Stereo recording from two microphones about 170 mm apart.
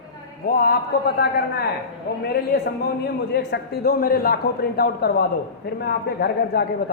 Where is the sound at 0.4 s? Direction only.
60° left (ahead or behind).